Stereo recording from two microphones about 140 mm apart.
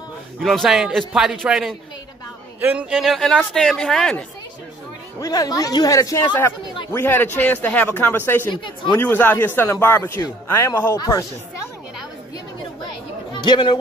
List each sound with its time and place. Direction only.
0.4 s a man's voice: centre (ahead or behind)
5.2 s speech: 25° left (ahead or behind)
13.3 s speech: 35° left (ahead or behind)